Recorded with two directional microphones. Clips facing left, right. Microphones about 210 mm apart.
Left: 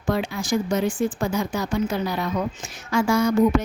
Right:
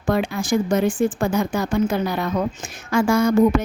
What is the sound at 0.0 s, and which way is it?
A woman's voice, 55° right (ahead or behind).